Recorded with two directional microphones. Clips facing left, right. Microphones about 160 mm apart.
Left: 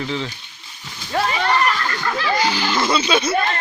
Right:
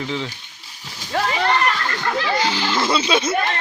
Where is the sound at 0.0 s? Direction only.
15° right (ahead or behind).